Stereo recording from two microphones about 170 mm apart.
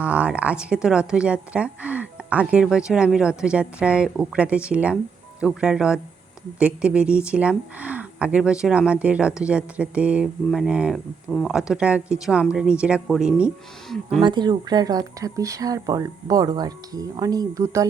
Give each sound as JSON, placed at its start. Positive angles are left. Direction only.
{"t": 0.0, "sound": "speech", "side_deg": -5}
{"t": 14.2, "sound": "speech", "side_deg": -25}